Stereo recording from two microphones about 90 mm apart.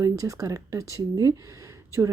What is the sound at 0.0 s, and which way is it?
Speech, 40° right (ahead or behind).